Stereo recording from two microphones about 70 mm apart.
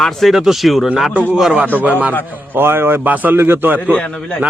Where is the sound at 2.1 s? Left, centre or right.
Left.